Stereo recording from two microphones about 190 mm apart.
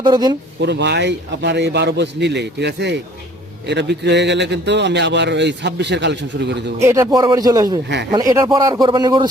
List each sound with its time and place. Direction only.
0.0 s speech: 20° right (ahead or behind)
0.6 s a man's voice: 65° right (ahead or behind)
6.7 s speech: 15° right (ahead or behind)